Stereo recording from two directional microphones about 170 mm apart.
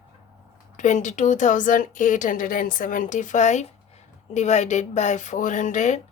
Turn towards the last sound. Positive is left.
turn(degrees=45)  # may be behind; listen again after turning